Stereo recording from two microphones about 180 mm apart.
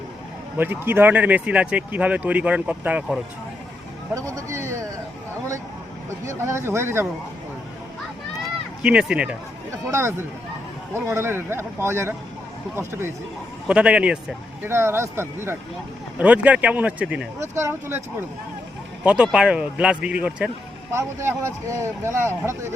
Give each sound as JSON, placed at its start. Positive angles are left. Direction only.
{"t": 0.5, "sound": "speech", "side_deg": -10}
{"t": 6.2, "sound": "speech", "side_deg": -15}
{"t": 8.8, "sound": "speech", "side_deg": -5}
{"t": 13.7, "sound": "speech", "side_deg": -5}
{"t": 19.0, "sound": "a man's voice", "side_deg": -5}